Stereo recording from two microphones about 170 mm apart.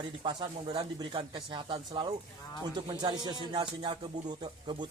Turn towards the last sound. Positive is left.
turn(degrees=-25)  # may be behind; listen again after turning